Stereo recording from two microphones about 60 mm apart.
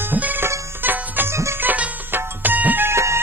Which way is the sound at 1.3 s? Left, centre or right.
Right.